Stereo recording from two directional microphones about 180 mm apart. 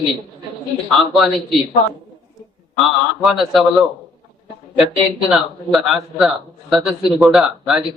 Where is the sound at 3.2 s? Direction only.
Centre (ahead or behind).